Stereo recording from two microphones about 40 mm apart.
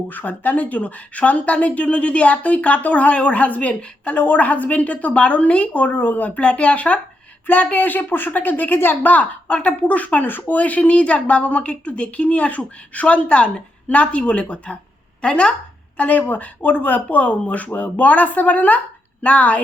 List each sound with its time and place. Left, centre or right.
0.1 s a woman's voice: left
4.1 s a woman's voice: left
5.9 s a woman's voice: left
9.1 s a woman's voice: left
10.2 s speech: left
10.5 s a woman's voice: left
16.0 s a woman's voice: left